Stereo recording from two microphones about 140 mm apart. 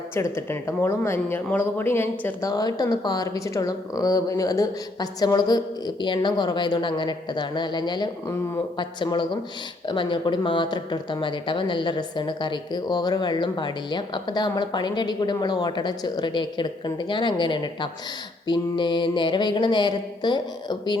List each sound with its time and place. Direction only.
0.1 s speech: 15° left (ahead or behind)